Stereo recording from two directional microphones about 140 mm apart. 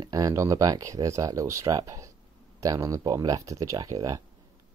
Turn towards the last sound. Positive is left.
turn(degrees=-25)  # may be behind; listen again after turning